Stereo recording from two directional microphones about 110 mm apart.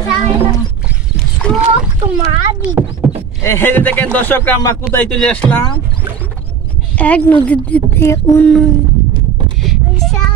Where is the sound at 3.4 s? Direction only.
20° left (ahead or behind).